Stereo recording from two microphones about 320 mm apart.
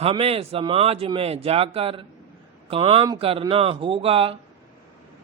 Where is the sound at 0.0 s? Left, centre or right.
Centre.